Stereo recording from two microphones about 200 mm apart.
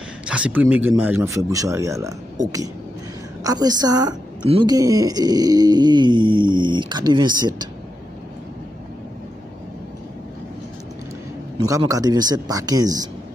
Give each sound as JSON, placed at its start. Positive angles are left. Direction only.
{"t": 0.3, "sound": "speech", "side_deg": -5}
{"t": 11.5, "sound": "speech", "side_deg": -20}